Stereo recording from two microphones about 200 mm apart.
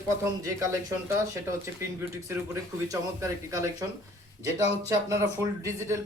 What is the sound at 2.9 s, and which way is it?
Speech, 15° right (ahead or behind).